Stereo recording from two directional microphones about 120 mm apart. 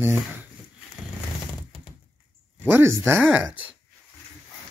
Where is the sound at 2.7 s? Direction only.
20° right (ahead or behind).